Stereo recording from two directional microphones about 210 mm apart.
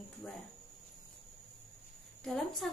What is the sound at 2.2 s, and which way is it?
Speech, centre (ahead or behind).